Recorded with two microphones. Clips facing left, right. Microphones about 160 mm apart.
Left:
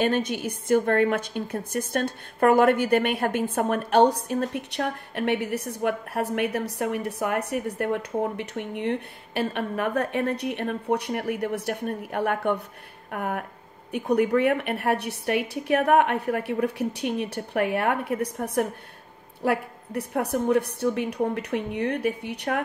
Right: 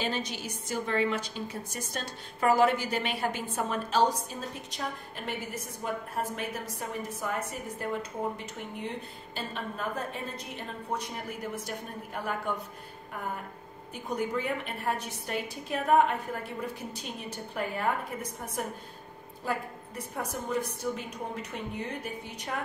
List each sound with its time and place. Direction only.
0.0 s a woman's voice: 55° left (ahead or behind)